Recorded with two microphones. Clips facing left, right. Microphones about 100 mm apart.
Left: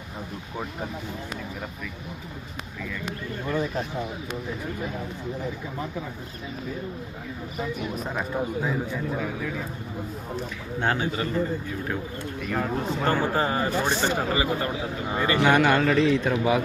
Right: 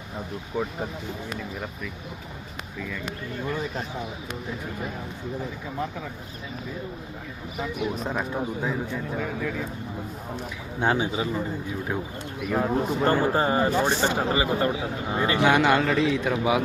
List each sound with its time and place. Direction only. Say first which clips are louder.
7.6 s speech: right 2 dB; centre (ahead or behind)
10.8 s speech: right 2 dB; 15° right (ahead or behind)
13.3 s speech: right 2 dB; 25° right (ahead or behind); by 16.6 s 10° right (ahead or behind)